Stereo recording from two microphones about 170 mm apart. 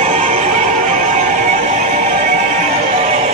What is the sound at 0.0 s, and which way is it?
Music, 40° right (ahead or behind).